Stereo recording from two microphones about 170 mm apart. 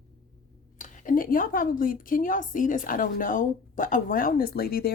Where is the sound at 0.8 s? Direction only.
55° left (ahead or behind).